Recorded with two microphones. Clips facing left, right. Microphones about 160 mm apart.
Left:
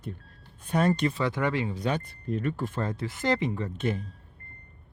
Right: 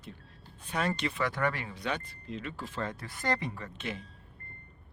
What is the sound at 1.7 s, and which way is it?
Speech, 40° left (ahead or behind).